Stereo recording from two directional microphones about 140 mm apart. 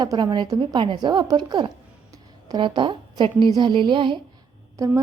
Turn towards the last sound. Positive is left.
turn(degrees=-20)  # may be behind; listen again after turning